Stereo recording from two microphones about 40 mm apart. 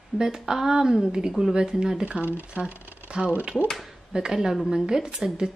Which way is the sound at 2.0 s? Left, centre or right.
Right.